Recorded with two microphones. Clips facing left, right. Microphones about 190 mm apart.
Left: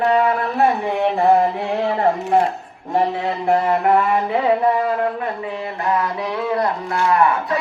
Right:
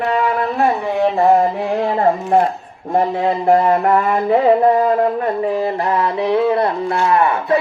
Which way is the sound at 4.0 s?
40° right (ahead or behind).